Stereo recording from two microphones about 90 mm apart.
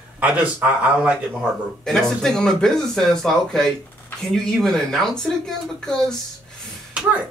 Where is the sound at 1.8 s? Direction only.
5° left (ahead or behind).